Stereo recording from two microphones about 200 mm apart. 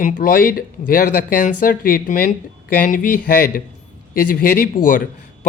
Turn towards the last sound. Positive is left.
turn(degrees=40)  # may be behind; listen again after turning